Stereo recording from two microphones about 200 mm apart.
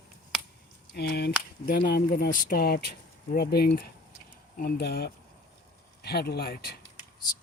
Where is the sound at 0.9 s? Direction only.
50° left (ahead or behind).